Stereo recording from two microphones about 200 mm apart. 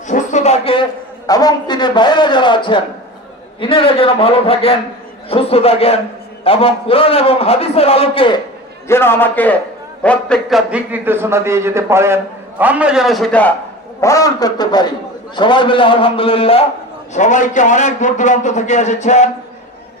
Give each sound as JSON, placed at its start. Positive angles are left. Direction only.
{"t": 0.1, "sound": "a sound", "side_deg": 40}
{"t": 1.3, "sound": "a man's voice", "side_deg": 20}
{"t": 8.9, "sound": "a man's voice", "side_deg": 10}
{"t": 10.7, "sound": "a man's voice", "side_deg": -10}
{"t": 14.0, "sound": "a man's voice", "side_deg": 15}